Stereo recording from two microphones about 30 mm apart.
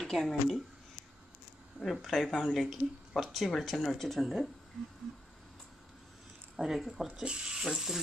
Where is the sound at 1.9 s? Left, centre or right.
Centre.